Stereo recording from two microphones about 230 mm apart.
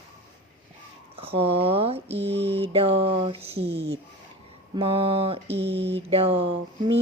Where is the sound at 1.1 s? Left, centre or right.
Right.